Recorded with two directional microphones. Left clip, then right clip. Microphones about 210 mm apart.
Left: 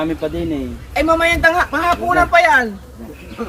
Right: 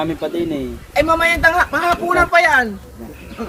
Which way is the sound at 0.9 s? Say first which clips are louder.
Even; 15° right (ahead or behind).